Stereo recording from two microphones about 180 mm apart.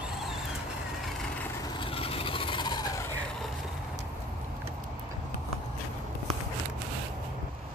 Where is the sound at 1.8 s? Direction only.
30° left (ahead or behind).